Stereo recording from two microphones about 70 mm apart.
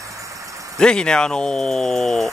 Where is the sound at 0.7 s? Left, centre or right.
Centre.